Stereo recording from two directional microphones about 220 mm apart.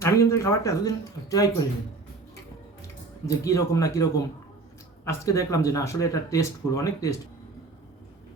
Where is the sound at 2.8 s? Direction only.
15° left (ahead or behind).